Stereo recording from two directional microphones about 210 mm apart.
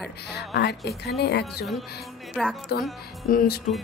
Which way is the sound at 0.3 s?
50° left (ahead or behind).